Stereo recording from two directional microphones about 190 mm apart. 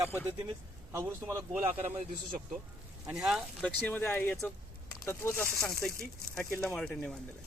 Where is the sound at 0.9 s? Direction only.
15° right (ahead or behind).